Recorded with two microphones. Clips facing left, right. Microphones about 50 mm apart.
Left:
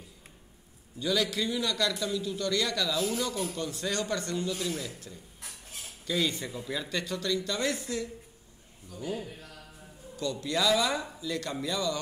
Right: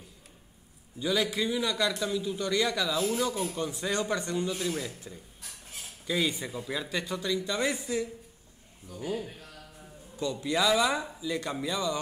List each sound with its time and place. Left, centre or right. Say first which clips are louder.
0.9 s a man's voice: right 1 dB; centre